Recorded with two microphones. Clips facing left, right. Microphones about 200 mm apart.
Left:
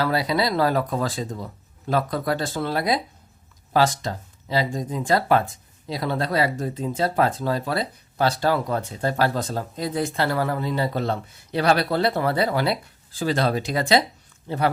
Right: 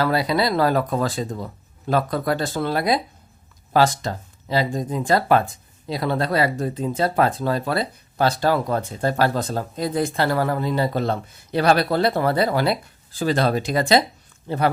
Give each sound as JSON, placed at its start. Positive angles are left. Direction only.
{"t": 0.0, "sound": "speech", "side_deg": -55}